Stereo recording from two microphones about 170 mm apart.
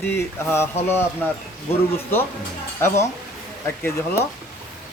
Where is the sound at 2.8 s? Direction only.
15° left (ahead or behind).